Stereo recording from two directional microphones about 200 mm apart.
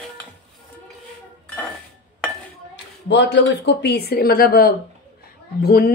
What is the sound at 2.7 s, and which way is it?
Speech, 60° left (ahead or behind).